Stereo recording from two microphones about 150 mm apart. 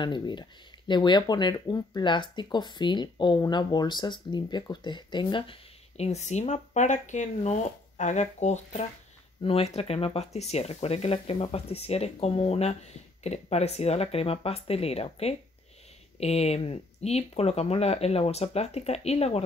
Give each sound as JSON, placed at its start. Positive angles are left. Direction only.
{"t": 0.0, "sound": "speech", "side_deg": 30}